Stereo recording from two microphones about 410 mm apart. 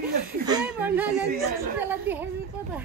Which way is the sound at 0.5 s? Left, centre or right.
Centre.